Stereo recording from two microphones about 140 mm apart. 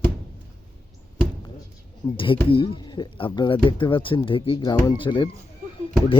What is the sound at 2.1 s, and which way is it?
Speech, 40° left (ahead or behind).